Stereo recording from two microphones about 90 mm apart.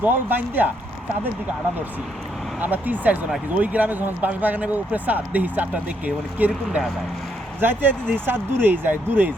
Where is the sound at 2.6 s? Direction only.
20° right (ahead or behind).